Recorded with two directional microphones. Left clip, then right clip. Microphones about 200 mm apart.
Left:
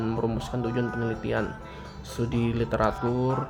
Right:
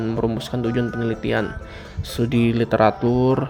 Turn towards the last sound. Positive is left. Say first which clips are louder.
# right 8 dB
turn(degrees=-25)  # may be behind; listen again after turning